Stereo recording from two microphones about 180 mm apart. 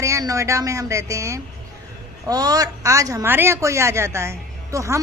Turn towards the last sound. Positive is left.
turn(degrees=-15)  # may be behind; listen again after turning